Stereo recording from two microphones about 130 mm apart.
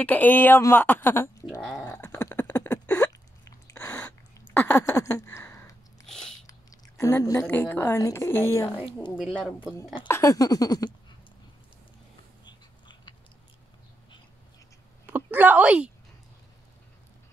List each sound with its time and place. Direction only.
0.0 s speech: 15° left (ahead or behind)
1.6 s speech: centre (ahead or behind)
1.9 s a sound: 20° left (ahead or behind)
3.1 s hiccup: 25° left (ahead or behind)
4.8 s a sound: 25° left (ahead or behind)
6.0 s biting: 5° left (ahead or behind)
7.0 s a woman's voice: 20° left (ahead or behind)
9.1 s speech: 5° right (ahead or behind)
10.0 s a woman's voice: 25° left (ahead or behind)
12.4 s biting: 35° left (ahead or behind)
15.0 s a woman's voice: 15° right (ahead or behind)